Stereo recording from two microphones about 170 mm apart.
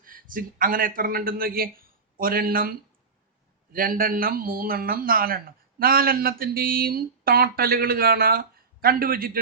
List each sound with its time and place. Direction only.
0.0 s a man's voice: 55° right (ahead or behind)